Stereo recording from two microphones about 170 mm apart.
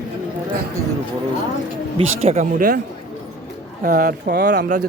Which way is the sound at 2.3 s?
40° right (ahead or behind).